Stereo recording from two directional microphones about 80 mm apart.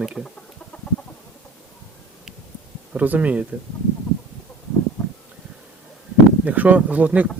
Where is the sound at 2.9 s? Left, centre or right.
Centre.